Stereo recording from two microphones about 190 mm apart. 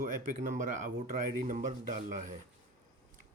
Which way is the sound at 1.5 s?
40° right (ahead or behind).